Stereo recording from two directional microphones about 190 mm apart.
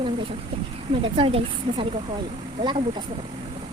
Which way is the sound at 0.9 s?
30° right (ahead or behind).